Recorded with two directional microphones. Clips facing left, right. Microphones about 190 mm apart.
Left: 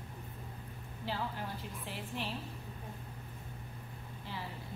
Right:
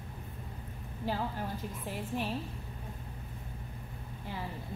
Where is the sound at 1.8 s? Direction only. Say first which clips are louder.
Right 5 dB; 45° right (ahead or behind).